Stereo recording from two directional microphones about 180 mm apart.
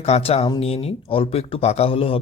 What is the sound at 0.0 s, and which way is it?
A man's voice, 35° left (ahead or behind).